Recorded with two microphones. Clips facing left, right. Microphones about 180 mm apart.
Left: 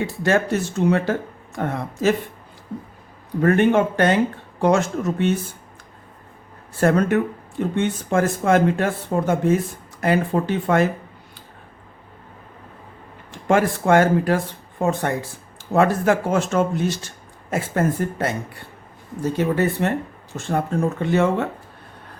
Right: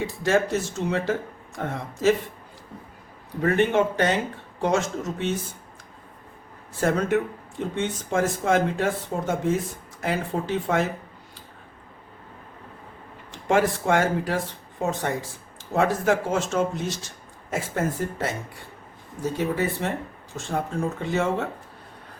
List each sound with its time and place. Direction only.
0.0 s speech: 60° left (ahead or behind)
3.4 s speech: 55° left (ahead or behind)
6.7 s speech: 60° left (ahead or behind)
13.3 s speech: 55° left (ahead or behind)
21.0 s speech: 60° left (ahead or behind)